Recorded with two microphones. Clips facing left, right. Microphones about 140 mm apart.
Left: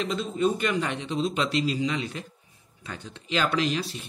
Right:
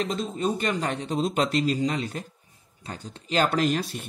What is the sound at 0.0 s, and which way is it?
Speech, 40° right (ahead or behind).